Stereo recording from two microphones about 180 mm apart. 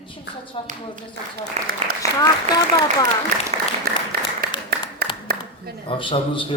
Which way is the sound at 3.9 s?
55° right (ahead or behind).